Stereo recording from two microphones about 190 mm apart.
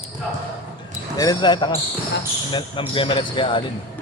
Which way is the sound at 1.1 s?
20° left (ahead or behind).